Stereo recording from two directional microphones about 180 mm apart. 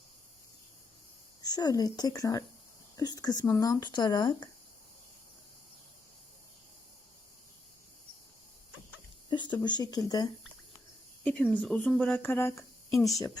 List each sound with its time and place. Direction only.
1.4 s speech: 20° left (ahead or behind)
9.3 s speech: 25° left (ahead or behind)
11.2 s speech: 5° left (ahead or behind)